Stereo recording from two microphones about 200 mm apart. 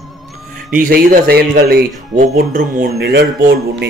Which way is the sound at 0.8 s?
50° right (ahead or behind).